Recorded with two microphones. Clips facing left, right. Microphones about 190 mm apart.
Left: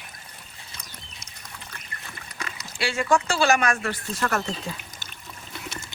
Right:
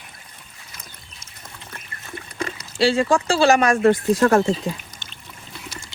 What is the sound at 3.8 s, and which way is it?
Speech, 50° right (ahead or behind).